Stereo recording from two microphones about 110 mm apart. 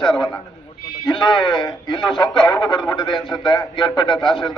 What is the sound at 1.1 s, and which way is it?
A man's voice, 45° left (ahead or behind).